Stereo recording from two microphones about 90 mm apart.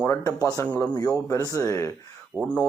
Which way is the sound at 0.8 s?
40° left (ahead or behind).